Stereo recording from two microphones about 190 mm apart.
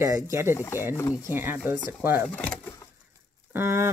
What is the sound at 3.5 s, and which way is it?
Speech, 15° right (ahead or behind).